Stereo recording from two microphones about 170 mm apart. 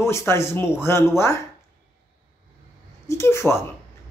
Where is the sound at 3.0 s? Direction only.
15° left (ahead or behind).